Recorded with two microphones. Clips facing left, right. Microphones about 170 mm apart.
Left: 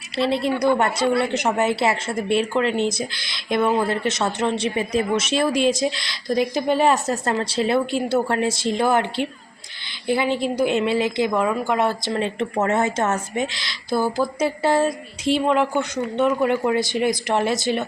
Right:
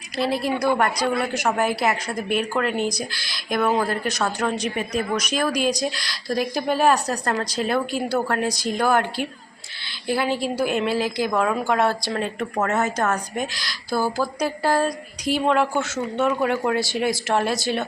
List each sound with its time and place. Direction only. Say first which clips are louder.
0.2 s speech: left 2 dB; 25° left (ahead or behind)